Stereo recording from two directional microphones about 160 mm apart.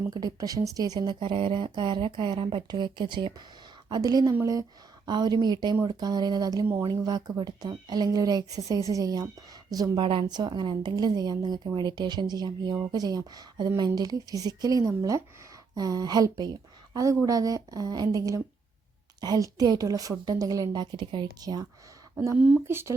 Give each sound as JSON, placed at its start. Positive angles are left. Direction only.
{"t": 0.1, "sound": "a woman's voice", "side_deg": -25}
{"t": 22.4, "sound": "speech", "side_deg": -5}